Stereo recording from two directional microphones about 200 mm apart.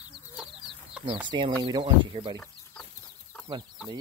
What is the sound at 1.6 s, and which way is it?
Speech, 25° right (ahead or behind).